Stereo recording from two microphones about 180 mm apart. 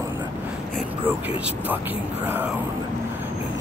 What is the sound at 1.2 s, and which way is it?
Speech, 10° right (ahead or behind).